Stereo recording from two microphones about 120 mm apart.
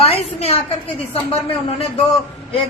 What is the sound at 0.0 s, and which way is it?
Speech, 60° left (ahead or behind).